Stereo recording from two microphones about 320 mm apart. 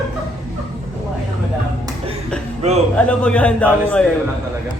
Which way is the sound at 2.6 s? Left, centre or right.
Right.